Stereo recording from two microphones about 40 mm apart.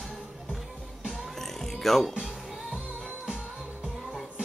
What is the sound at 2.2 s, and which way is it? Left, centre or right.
Music, centre.